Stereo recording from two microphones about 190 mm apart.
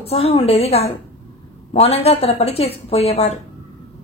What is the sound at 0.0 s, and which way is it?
A woman's voice, 30° left (ahead or behind).